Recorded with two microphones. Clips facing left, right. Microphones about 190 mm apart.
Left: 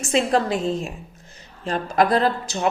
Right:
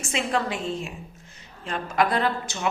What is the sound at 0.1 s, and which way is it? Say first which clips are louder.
A woman's voice: left 7 dB; 35° left (ahead or behind).